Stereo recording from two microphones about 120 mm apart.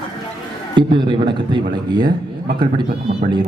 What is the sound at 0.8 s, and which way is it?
Speech, 40° right (ahead or behind).